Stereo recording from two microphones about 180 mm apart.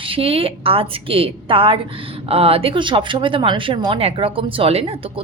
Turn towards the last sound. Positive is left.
turn(degrees=-30)  # may be behind; listen again after turning